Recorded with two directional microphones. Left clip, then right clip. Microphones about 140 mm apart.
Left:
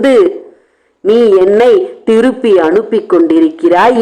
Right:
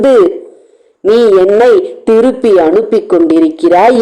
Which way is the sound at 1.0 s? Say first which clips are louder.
Right 1 dB; 15° left (ahead or behind).